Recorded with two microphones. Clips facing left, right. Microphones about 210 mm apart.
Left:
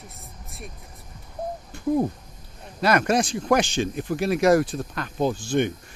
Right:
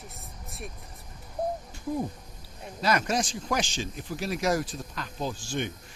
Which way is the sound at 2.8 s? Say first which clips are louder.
Left 6 dB; 60° left (ahead or behind).